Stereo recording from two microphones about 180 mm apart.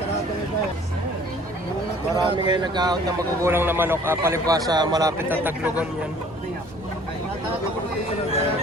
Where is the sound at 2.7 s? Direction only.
25° right (ahead or behind).